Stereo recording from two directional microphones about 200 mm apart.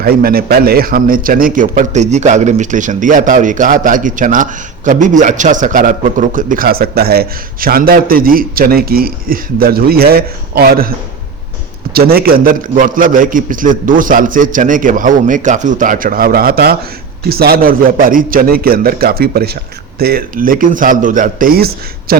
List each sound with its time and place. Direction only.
0.0 s a man's voice: 50° right (ahead or behind)
11.9 s a man's voice: 50° right (ahead or behind)